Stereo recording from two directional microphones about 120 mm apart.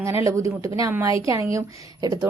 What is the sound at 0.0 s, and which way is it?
A woman's voice, 25° right (ahead or behind).